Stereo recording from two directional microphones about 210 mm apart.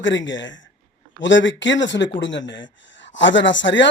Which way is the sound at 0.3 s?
60° left (ahead or behind).